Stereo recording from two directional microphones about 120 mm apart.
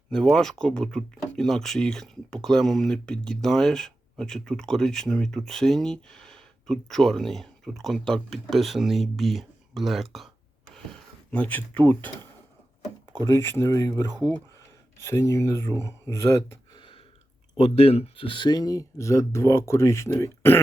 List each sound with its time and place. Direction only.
0.1 s speech: 5° left (ahead or behind)
11.3 s speech: 10° left (ahead or behind)
13.1 s speech: 35° right (ahead or behind)
13.4 s speech: 25° left (ahead or behind)
13.9 s speech: 35° right (ahead or behind)
15.1 s speech: 25° left (ahead or behind)
16.7 s a sound: 45° left (ahead or behind)
17.6 s speech: 60° left (ahead or behind); by 20.6 s 20° left (ahead or behind)